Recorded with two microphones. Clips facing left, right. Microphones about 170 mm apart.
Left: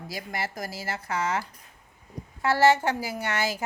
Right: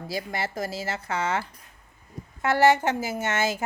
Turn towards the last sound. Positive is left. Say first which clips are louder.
# right 2 dB
turn(degrees=-25)  # may be behind; listen again after turning